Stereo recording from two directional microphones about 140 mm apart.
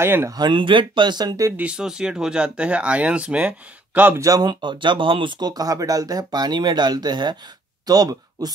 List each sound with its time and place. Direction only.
0.0 s speech: 15° right (ahead or behind)
0.4 s speech: 35° right (ahead or behind)
1.6 s speech: 5° right (ahead or behind); by 8.5 s 25° right (ahead or behind)